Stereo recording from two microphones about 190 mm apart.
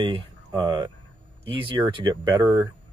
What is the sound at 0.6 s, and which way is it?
Speech, 20° right (ahead or behind).